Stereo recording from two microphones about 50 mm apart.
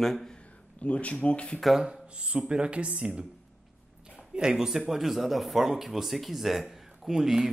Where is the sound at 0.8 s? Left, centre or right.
Left.